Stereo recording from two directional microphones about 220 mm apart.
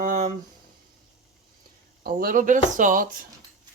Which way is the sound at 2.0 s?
40° right (ahead or behind).